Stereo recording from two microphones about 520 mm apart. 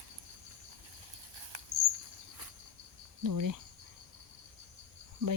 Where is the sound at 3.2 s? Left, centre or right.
Right.